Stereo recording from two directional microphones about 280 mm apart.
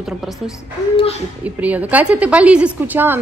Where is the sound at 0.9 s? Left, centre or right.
Left.